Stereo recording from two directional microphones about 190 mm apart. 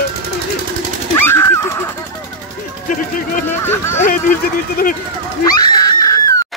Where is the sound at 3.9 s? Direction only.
45° left (ahead or behind).